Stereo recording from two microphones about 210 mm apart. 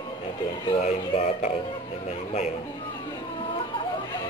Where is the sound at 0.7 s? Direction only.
30° left (ahead or behind).